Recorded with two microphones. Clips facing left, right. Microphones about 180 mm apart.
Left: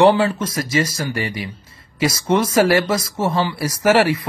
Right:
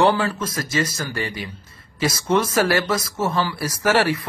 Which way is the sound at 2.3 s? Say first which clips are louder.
Left 4 dB; 30° left (ahead or behind).